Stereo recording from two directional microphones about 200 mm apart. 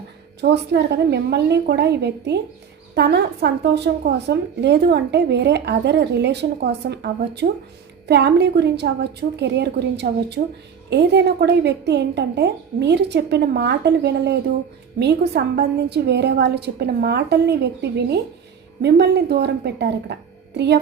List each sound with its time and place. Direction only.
0.4 s speech: 55° right (ahead or behind)